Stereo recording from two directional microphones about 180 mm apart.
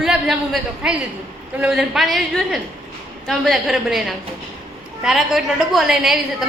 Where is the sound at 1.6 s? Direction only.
5° right (ahead or behind).